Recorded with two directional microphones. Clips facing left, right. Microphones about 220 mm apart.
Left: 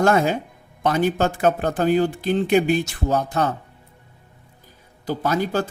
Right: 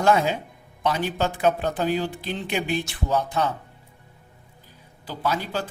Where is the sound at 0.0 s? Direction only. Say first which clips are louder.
Left 3 dB; 50° left (ahead or behind).